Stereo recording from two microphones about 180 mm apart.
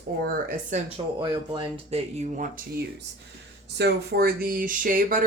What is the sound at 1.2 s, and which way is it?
Speech, 30° right (ahead or behind).